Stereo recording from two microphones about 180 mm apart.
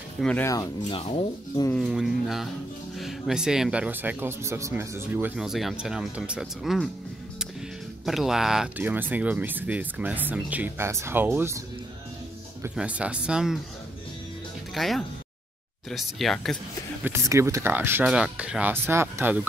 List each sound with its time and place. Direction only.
0.2 s speech: 5° left (ahead or behind)
0.5 s speech: 25° left (ahead or behind)
1.8 s speech: centre (ahead or behind)
8.0 s speech: centre (ahead or behind)
12.6 s speech: 5° right (ahead or behind)
14.7 s speech: centre (ahead or behind)
17.0 s speech: 15° right (ahead or behind)